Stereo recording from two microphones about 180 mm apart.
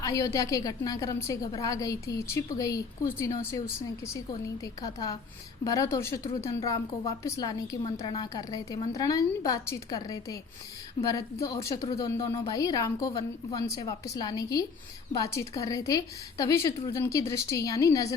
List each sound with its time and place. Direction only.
0.0 s a woman's voice: 20° left (ahead or behind)
4.6 s a woman's voice: 20° left (ahead or behind)